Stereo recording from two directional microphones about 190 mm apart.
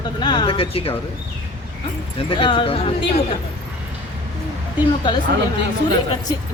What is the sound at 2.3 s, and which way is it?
Speech, 25° left (ahead or behind).